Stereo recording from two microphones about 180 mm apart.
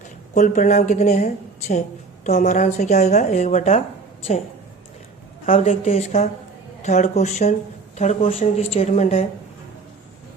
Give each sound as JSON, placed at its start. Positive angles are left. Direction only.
{"t": 0.3, "sound": "a woman's voice", "side_deg": 45}
{"t": 5.5, "sound": "a woman's voice", "side_deg": 40}